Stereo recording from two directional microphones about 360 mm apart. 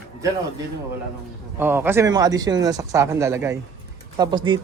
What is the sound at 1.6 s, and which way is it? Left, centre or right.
Speech, centre.